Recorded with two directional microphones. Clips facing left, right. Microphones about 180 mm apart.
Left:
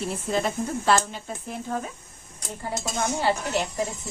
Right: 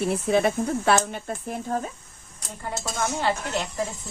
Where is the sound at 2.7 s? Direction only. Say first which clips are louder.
Left 1 dB; 15° left (ahead or behind).